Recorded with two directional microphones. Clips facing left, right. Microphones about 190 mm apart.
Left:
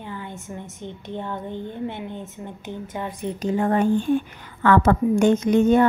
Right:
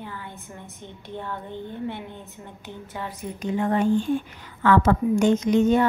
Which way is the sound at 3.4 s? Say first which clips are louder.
Left 2 dB; 45° left (ahead or behind).